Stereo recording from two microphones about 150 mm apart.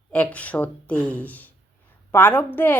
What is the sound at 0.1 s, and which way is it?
A woman's voice, 10° left (ahead or behind).